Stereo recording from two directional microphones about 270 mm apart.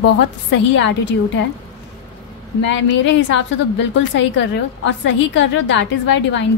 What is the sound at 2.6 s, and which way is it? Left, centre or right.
A woman's voice, left.